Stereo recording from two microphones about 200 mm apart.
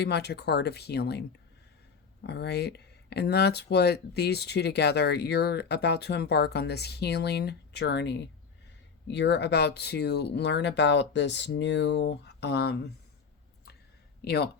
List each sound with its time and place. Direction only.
0.0 s speech: 55° left (ahead or behind)
2.2 s speech: 55° left (ahead or behind)
14.3 s speech: 55° left (ahead or behind)